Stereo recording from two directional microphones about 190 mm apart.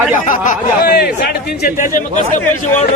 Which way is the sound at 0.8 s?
60° left (ahead or behind).